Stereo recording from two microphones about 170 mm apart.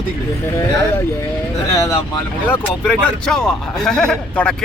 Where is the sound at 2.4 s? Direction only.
10° left (ahead or behind).